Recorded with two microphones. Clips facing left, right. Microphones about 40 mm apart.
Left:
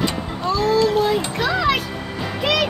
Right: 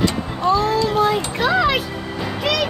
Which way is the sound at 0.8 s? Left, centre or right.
Right.